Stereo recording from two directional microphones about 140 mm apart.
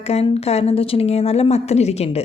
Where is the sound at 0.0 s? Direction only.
45° left (ahead or behind).